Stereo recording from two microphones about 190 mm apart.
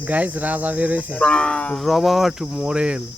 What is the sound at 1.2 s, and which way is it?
Cricket, 5° left (ahead or behind).